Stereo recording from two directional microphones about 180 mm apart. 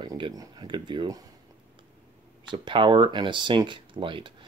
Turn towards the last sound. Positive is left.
turn(degrees=-25)  # may be behind; listen again after turning